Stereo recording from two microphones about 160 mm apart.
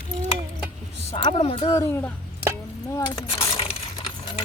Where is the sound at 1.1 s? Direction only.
40° left (ahead or behind).